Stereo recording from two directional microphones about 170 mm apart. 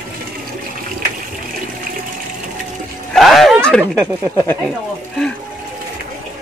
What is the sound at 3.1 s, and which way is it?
Speech, centre (ahead or behind).